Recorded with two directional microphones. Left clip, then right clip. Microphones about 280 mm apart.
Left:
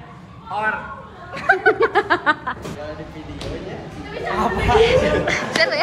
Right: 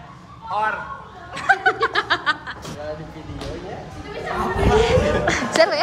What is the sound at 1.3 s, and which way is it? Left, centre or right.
Snicker, centre.